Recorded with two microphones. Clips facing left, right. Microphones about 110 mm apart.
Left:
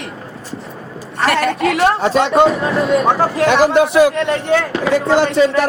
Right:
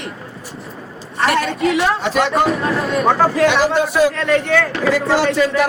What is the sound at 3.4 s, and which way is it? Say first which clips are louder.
Speech: left 3 dB; 50° left (ahead or behind).